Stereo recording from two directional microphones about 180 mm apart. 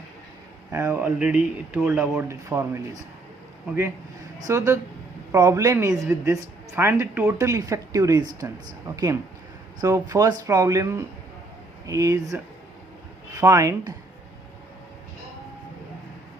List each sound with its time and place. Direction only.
0.7 s speech: 15° right (ahead or behind)
4.4 s speech: 15° right (ahead or behind)